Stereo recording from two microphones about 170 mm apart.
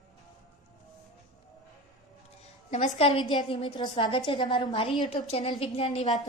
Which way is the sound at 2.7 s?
35° left (ahead or behind).